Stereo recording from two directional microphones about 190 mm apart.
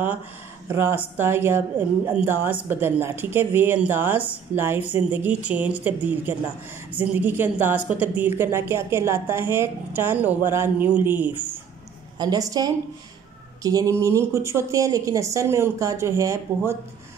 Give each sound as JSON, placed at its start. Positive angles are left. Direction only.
{"t": 0.7, "sound": "a woman's voice", "side_deg": -15}